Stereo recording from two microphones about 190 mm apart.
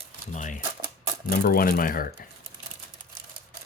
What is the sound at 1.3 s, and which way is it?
Speech, 50° left (ahead or behind).